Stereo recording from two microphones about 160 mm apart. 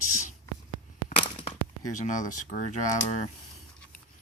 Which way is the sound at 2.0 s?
50° left (ahead or behind).